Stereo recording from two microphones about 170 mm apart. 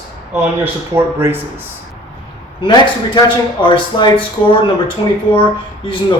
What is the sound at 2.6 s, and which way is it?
Speech, 30° left (ahead or behind).